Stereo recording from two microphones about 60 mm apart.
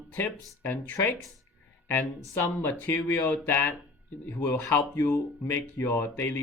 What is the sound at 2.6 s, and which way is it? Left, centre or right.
Speech, left.